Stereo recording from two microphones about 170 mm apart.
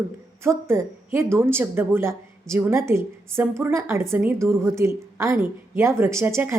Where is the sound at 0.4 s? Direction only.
15° right (ahead or behind).